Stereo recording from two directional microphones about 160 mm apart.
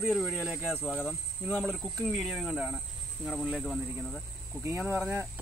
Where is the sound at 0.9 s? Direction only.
10° left (ahead or behind).